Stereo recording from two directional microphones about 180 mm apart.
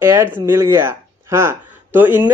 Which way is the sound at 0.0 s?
15° right (ahead or behind).